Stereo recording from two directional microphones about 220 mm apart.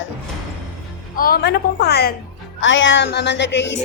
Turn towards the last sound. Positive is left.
turn(degrees=55)  # may be behind; listen again after turning